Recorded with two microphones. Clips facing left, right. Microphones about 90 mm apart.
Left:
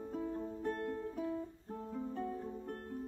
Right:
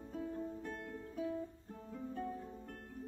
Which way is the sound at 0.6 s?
45° left (ahead or behind).